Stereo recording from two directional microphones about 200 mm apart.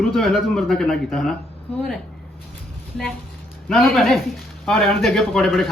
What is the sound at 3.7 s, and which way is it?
A man's voice, centre (ahead or behind).